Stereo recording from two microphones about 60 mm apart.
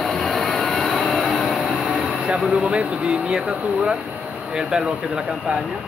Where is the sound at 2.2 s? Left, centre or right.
Centre.